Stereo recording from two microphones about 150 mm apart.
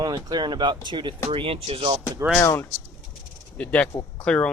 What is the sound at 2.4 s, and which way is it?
Speech, 20° left (ahead or behind).